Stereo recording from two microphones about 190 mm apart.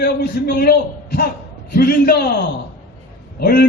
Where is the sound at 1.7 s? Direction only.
55° left (ahead or behind).